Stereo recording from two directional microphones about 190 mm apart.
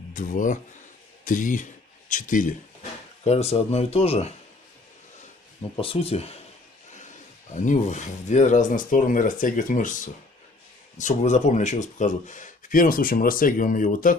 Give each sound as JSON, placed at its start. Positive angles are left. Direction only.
{"t": 0.1, "sound": "speech", "side_deg": 45}
{"t": 5.8, "sound": "speech", "side_deg": 30}
{"t": 7.5, "sound": "speech", "side_deg": 40}